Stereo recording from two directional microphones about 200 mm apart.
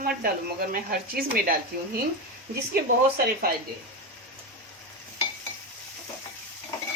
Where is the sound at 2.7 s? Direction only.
50° right (ahead or behind).